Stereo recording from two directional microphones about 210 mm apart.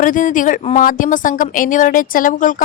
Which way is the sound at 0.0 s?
40° left (ahead or behind).